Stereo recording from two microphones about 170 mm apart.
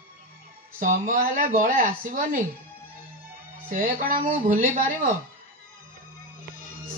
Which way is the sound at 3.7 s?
55° right (ahead or behind).